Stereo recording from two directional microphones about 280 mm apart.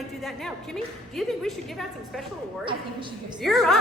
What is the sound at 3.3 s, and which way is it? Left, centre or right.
Speech, centre.